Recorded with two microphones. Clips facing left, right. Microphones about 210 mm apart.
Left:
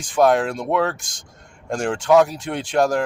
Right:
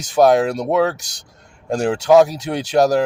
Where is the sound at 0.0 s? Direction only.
40° right (ahead or behind).